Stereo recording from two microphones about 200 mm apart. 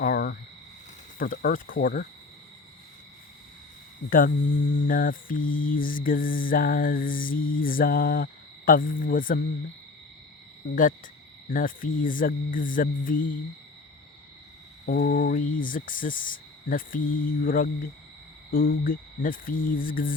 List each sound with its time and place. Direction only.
0.0 s a sound: 45° left (ahead or behind)
1.2 s mantra: 45° left (ahead or behind)
4.1 s mantra: 45° left (ahead or behind)
10.6 s speech: 60° left (ahead or behind)
11.4 s mantra: 45° left (ahead or behind)
14.8 s mantra: 45° left (ahead or behind)